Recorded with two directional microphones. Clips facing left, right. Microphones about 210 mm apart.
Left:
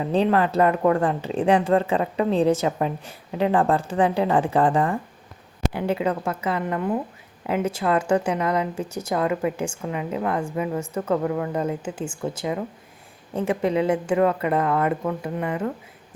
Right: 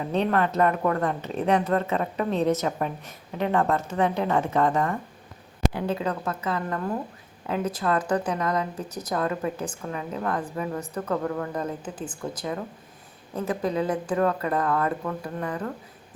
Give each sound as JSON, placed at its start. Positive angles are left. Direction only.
{"t": 0.1, "sound": "a woman's voice", "side_deg": 30}
{"t": 6.7, "sound": "a woman's voice", "side_deg": 15}
{"t": 10.8, "sound": "a woman's voice", "side_deg": 25}